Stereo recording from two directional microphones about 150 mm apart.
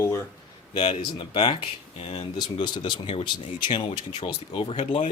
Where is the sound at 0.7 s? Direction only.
35° left (ahead or behind).